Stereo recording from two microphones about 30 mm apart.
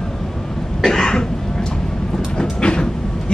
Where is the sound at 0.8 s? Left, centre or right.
Centre.